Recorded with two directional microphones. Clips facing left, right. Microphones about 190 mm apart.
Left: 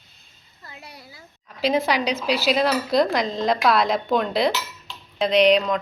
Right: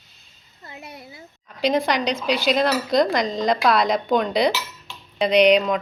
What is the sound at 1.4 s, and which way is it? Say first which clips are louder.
A woman's voice: right 1 dB; 5° left (ahead or behind).